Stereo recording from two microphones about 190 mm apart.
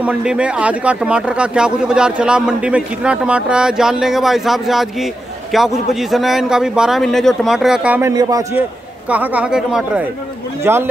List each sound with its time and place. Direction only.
0.0 s speech: 5° right (ahead or behind)
8.1 s a man's voice: 20° right (ahead or behind)
9.1 s speech: 5° right (ahead or behind)